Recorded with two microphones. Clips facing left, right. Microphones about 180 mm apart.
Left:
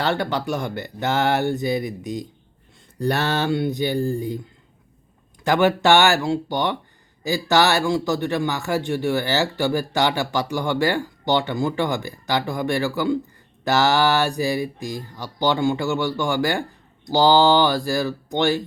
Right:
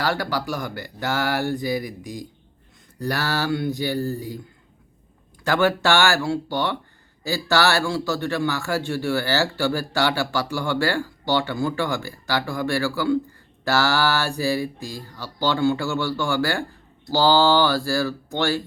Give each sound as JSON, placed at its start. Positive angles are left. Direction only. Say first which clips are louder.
{"t": 0.0, "sound": "speech", "louder": "left 2 dB", "side_deg": 25}
{"t": 5.4, "sound": "speech", "louder": "left 2 dB", "side_deg": 20}